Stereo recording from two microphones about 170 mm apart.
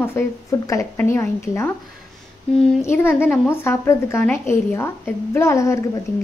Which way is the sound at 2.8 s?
15° left (ahead or behind).